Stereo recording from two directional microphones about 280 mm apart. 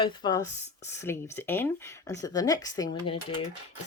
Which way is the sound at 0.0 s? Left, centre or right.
Centre.